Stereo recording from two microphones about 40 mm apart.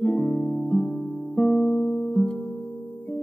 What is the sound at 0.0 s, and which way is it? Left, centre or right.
Music, centre.